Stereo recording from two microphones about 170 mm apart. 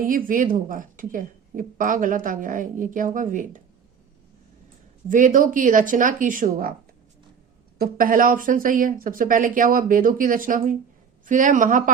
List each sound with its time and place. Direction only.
0.3 s speech: 55° right (ahead or behind)
5.0 s speech: 50° right (ahead or behind)
7.8 s speech: 55° right (ahead or behind)